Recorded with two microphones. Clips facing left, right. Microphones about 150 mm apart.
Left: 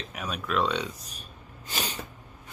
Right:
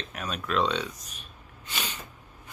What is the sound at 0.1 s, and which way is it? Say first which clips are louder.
Speech: even; 10° left (ahead or behind).